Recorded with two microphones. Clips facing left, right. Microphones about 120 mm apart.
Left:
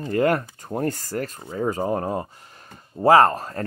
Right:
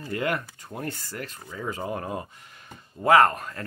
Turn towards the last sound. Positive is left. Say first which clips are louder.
# left 3 dB
turn(degrees=35)  # may be behind; listen again after turning